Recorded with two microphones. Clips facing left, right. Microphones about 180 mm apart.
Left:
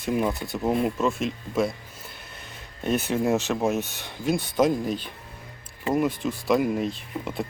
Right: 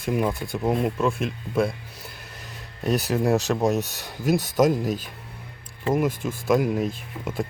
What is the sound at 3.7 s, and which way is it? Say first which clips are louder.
Speech: right 2 dB; 40° right (ahead or behind).